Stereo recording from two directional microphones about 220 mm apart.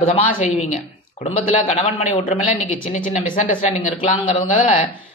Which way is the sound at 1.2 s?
25° left (ahead or behind).